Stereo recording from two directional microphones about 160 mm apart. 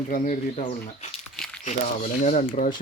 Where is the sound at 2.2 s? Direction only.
45° left (ahead or behind).